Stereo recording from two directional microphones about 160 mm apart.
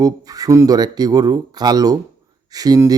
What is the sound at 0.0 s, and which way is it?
A man's voice, 25° right (ahead or behind).